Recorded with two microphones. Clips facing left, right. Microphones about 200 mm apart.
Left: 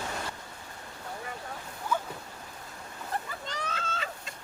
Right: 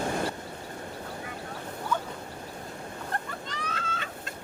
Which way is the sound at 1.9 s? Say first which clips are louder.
Even; 10° left (ahead or behind).